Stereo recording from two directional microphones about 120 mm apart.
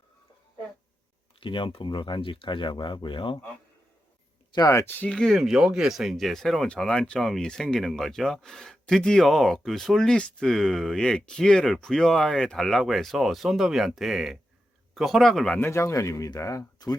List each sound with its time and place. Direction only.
1.4 s speech: 45° left (ahead or behind)
4.5 s speech: 25° left (ahead or behind)
4.9 s speech: 10° left (ahead or behind)
15.5 s speech: 20° left (ahead or behind)